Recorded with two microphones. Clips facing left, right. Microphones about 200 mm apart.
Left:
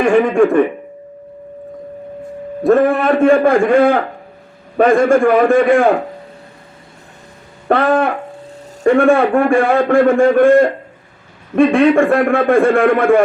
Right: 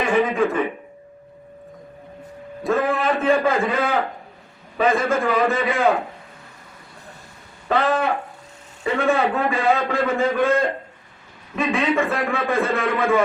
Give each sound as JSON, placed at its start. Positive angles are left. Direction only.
{"t": 0.0, "sound": "a man's voice", "side_deg": 50}
{"t": 2.6, "sound": "a man's voice", "side_deg": 55}
{"t": 7.7, "sound": "a man's voice", "side_deg": 60}